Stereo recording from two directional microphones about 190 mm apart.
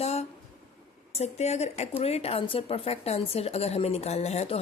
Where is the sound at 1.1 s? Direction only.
35° left (ahead or behind).